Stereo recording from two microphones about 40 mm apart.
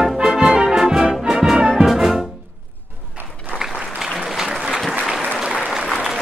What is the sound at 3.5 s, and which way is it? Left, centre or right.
Applause, centre.